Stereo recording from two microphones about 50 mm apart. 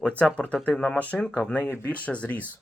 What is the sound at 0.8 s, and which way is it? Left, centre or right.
Speech, left.